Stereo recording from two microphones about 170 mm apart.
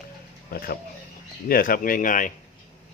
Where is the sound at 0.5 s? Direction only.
60° left (ahead or behind).